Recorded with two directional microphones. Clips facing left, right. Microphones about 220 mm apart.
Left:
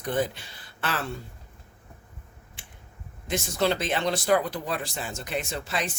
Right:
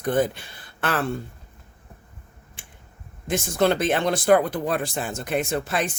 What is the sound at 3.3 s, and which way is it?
Speech, 50° right (ahead or behind).